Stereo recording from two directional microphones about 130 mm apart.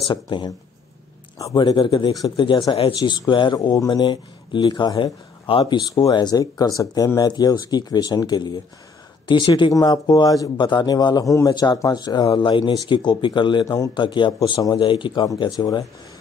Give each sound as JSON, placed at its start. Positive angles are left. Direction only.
{"t": 0.1, "sound": "speech", "side_deg": 35}